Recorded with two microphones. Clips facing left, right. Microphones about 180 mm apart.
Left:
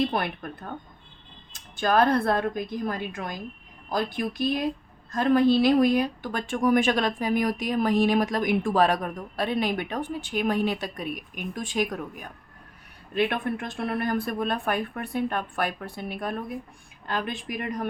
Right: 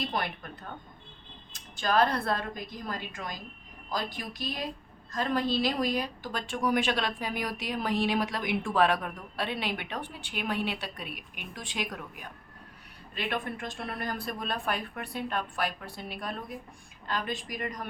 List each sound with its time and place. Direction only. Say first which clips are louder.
0.1 s speech: left 4 dB; 60° left (ahead or behind)
1.5 s a woman's voice: left 4 dB; 50° left (ahead or behind)
13.1 s a woman's voice: left 8 dB; 55° left (ahead or behind)